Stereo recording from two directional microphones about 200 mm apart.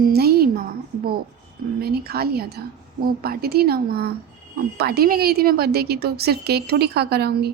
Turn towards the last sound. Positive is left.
turn(degrees=-55)  # may be behind; listen again after turning